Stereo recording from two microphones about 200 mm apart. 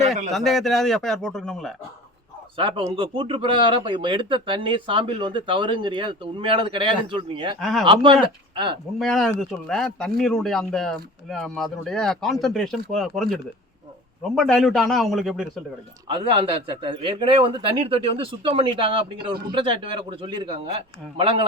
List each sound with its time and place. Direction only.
0.3 s speech: centre (ahead or behind)
2.6 s speech: 25° right (ahead or behind)
7.6 s speech: centre (ahead or behind)
7.9 s speech: 25° right (ahead or behind)
9.0 s speech: centre (ahead or behind)
16.0 s speech: 25° right (ahead or behind)